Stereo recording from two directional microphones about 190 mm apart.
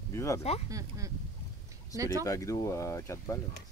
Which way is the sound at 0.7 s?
15° right (ahead or behind).